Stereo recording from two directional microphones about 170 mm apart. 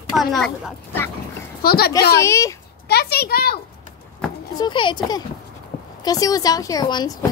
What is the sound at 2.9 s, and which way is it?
Speech, 70° left (ahead or behind).